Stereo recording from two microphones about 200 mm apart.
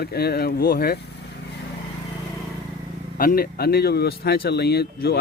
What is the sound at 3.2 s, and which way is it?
Speech, 45° left (ahead or behind).